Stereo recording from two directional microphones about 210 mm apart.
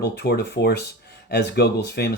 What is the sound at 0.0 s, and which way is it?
Speech, 50° left (ahead or behind).